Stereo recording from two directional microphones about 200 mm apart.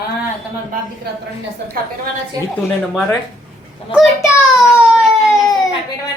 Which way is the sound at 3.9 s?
5° right (ahead or behind).